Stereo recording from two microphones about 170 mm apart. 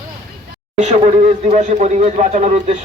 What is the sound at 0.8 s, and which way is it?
A man's voice, 40° right (ahead or behind).